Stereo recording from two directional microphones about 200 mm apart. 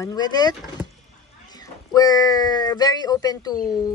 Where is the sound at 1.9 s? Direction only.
20° left (ahead or behind).